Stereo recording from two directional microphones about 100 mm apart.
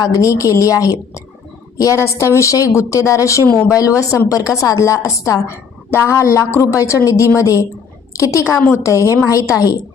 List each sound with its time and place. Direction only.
0.0 s a woman's voice: 35° left (ahead or behind)